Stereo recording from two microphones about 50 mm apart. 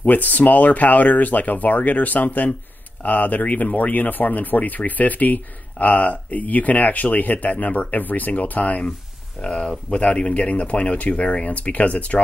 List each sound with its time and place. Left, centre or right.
0.0 s speech: left
9.4 s speech: centre